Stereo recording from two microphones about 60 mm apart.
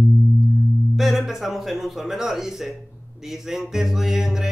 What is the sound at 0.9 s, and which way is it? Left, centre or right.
Speech, centre.